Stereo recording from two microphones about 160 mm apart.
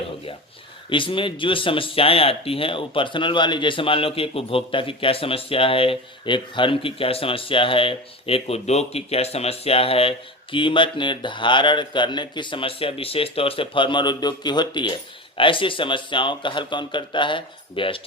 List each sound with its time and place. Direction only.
0.9 s speech: 30° left (ahead or behind)